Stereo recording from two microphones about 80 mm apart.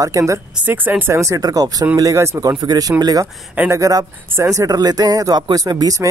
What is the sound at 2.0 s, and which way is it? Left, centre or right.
Speech, right.